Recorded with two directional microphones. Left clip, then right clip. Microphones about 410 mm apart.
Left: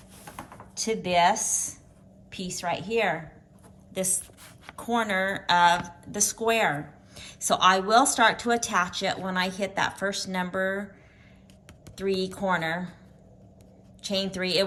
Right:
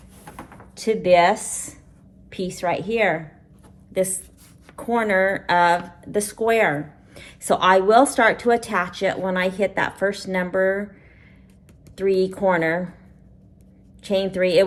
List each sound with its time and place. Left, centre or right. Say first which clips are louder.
0.8 s speech: right 7 dB; centre
4.6 s a woman's voice: right 5 dB; centre
12.2 s a woman's voice: right 8 dB; centre
14.0 s a woman's voice: right 8 dB; centre